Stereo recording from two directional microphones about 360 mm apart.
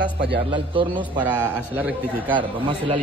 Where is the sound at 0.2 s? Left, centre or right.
Centre.